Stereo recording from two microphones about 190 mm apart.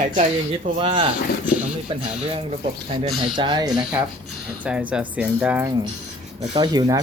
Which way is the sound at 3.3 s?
20° right (ahead or behind).